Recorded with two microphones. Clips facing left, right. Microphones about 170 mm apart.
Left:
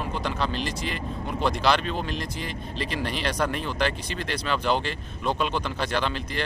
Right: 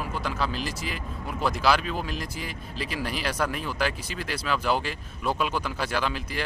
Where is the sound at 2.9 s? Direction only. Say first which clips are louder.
Left 1 dB; 5° right (ahead or behind).